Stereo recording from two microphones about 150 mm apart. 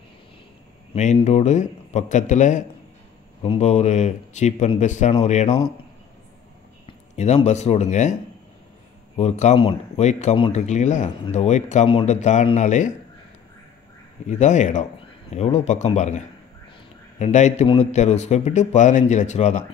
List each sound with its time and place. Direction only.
1.1 s speech: 45° left (ahead or behind)
7.2 s speech: 50° left (ahead or behind)
11.9 s speech: 35° left (ahead or behind)
12.2 s speech: 50° left (ahead or behind)
14.2 s speech: 50° left (ahead or behind)